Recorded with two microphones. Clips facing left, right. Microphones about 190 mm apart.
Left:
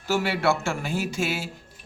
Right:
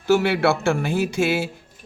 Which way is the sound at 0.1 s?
65° right (ahead or behind).